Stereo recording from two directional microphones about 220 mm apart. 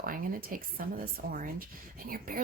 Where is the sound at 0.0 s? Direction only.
40° right (ahead or behind).